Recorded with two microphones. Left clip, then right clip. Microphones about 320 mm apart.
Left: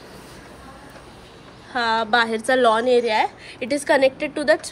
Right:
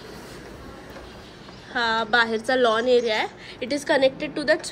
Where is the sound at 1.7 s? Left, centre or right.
Centre.